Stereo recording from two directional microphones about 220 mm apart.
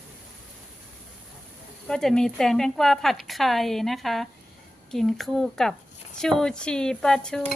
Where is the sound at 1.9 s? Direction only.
Centre (ahead or behind).